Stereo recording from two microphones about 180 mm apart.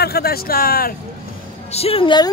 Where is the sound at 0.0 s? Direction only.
60° left (ahead or behind).